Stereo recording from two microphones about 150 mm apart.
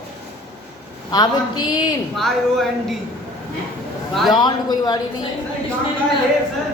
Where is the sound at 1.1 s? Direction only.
30° left (ahead or behind).